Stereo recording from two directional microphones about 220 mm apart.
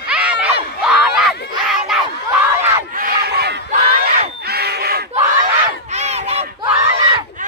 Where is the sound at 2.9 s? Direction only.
45° right (ahead or behind).